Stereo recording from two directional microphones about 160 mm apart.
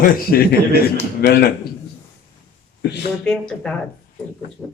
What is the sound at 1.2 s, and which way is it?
Speech, 75° left (ahead or behind).